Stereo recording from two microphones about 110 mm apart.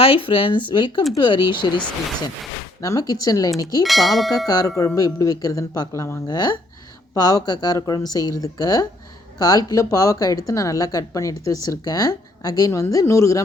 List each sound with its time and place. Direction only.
0.0 s speech: 55° left (ahead or behind)
2.8 s speech: 35° left (ahead or behind)
3.8 s a sound: centre (ahead or behind)
4.4 s speech: 35° left (ahead or behind)